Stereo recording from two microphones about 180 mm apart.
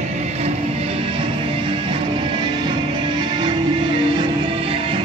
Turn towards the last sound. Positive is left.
turn(degrees=-30)  # may be behind; listen again after turning